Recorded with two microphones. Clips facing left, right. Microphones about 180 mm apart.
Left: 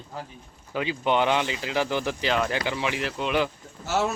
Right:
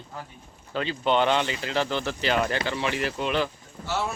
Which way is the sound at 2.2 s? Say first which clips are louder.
Right 1 dB; centre (ahead or behind).